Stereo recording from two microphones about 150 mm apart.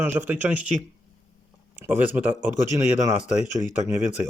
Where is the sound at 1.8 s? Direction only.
10° right (ahead or behind).